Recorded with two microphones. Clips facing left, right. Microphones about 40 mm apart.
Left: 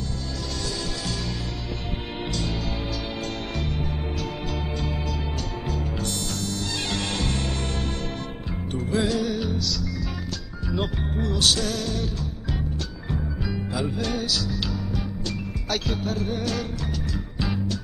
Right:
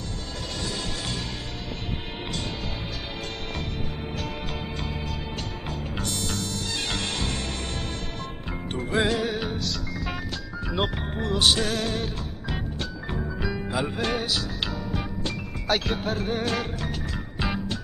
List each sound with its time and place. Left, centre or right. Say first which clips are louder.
5.7 s music: left 2 dB; right
7.0 s music: left 2 dB; centre
8.7 s music: even; right
11.3 s music: right 2 dB; right